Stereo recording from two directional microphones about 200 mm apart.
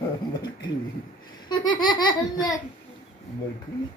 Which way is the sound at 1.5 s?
20° left (ahead or behind).